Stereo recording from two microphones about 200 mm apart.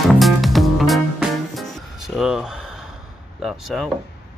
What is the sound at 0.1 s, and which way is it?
Music, centre (ahead or behind).